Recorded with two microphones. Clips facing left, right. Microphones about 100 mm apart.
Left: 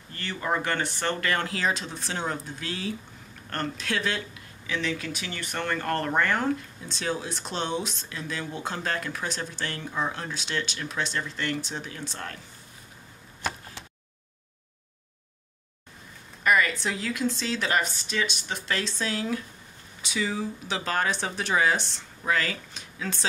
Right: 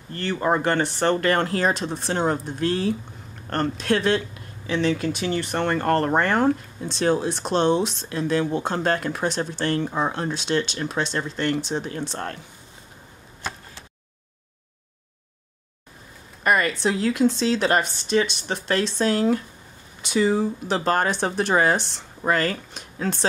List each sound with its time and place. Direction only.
0.1 s a woman's voice: 35° right (ahead or behind)
4.6 s a woman's voice: 35° right (ahead or behind)
16.4 s a woman's voice: 45° right (ahead or behind)